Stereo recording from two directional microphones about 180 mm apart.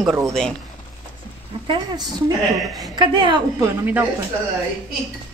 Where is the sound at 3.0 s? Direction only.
25° right (ahead or behind).